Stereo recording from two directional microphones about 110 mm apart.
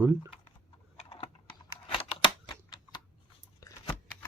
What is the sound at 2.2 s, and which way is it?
Typing, 40° left (ahead or behind).